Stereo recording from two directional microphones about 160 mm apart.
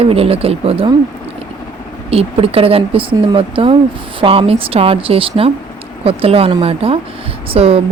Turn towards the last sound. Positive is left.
turn(degrees=-40)  # may be behind; listen again after turning